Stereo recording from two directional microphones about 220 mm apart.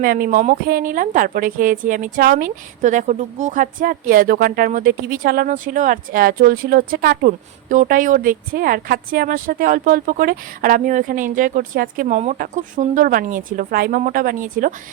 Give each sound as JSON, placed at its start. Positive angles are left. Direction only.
{"t": 0.0, "sound": "a woman's voice", "side_deg": -40}